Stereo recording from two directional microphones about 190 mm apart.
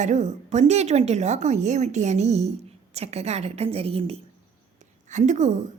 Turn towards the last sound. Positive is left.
turn(degrees=-40)  # may be behind; listen again after turning